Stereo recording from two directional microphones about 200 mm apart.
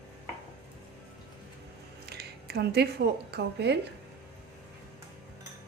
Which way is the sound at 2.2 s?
55° right (ahead or behind).